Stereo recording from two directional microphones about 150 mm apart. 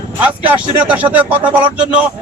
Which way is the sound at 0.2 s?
10° right (ahead or behind).